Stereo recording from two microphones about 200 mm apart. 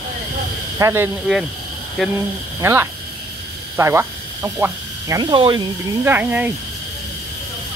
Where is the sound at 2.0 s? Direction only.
Centre (ahead or behind).